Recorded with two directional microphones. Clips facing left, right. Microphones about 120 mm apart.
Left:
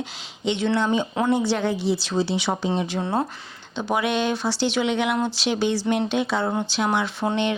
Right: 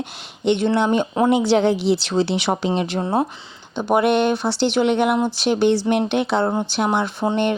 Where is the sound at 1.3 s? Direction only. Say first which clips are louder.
Right 7 dB; 85° right; by 2.7 s 65° right (ahead or behind).